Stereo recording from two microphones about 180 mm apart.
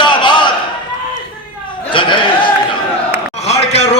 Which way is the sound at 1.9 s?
25° left (ahead or behind).